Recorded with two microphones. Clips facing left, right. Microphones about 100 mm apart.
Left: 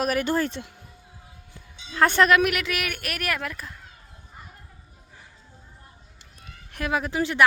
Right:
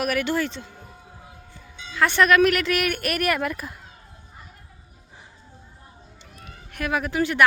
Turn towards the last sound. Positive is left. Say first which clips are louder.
# right 2 dB
turn(degrees=25)  # may be behind; listen again after turning